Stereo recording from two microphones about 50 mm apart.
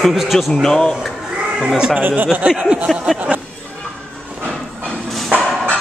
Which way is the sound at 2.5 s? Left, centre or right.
Right.